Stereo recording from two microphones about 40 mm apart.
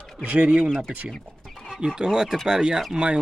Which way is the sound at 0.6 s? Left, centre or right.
Centre.